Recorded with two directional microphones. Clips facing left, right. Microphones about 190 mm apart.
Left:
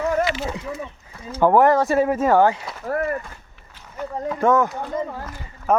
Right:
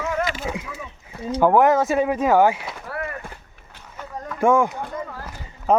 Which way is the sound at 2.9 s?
45° left (ahead or behind).